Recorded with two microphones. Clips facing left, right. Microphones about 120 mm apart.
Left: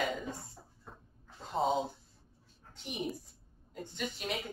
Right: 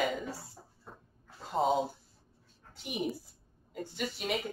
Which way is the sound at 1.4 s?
Centre (ahead or behind).